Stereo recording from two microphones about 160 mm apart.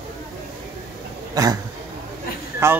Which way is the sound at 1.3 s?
20° right (ahead or behind).